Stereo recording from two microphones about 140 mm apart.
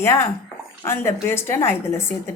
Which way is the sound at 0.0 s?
20° left (ahead or behind).